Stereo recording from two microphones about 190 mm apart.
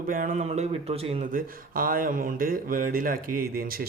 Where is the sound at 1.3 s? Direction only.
45° right (ahead or behind).